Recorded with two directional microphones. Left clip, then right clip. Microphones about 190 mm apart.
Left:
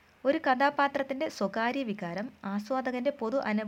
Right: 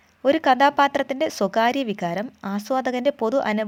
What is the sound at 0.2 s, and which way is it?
Speech, 30° right (ahead or behind).